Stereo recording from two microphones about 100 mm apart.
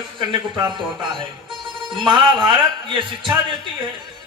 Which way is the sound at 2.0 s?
50° right (ahead or behind).